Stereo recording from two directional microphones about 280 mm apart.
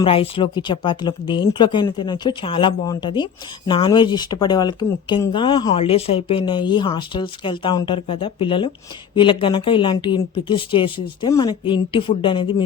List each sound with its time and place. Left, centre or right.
0.0 s speech: centre